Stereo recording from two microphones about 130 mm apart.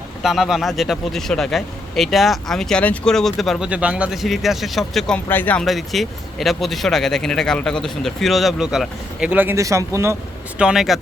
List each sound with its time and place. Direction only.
0.2 s speech: centre (ahead or behind); by 5.6 s 15° left (ahead or behind)
5.6 s speech: centre (ahead or behind)
9.6 s speech: 25° right (ahead or behind)
10.6 s speech: 5° right (ahead or behind)